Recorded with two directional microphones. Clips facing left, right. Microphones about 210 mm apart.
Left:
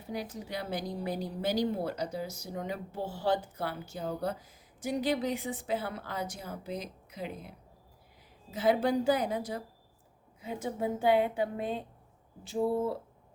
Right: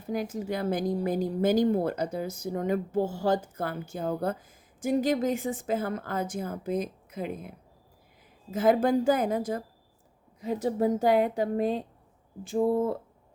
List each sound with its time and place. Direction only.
0.0 s a woman's voice: 50° right (ahead or behind)